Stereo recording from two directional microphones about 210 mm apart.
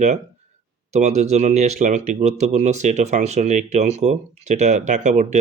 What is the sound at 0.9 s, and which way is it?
Speech, 35° right (ahead or behind).